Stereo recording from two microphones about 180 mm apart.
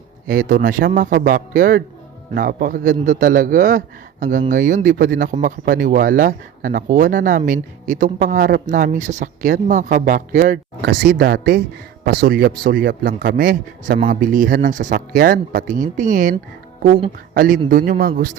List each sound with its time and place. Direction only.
0.3 s speech: 50° right (ahead or behind)
10.8 s a man's voice: 65° right (ahead or behind); by 16.3 s 45° right (ahead or behind)
17.3 s speech: 50° right (ahead or behind)